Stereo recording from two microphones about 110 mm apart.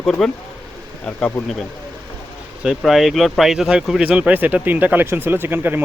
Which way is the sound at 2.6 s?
5° right (ahead or behind).